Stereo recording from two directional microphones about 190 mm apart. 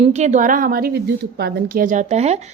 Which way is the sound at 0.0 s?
35° right (ahead or behind).